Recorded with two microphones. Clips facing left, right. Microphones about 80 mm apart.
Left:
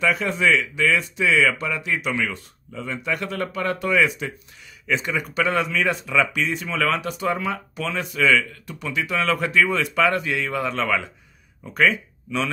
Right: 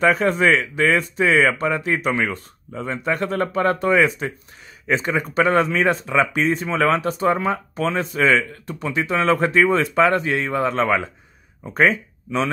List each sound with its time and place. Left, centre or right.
0.0 s speech: right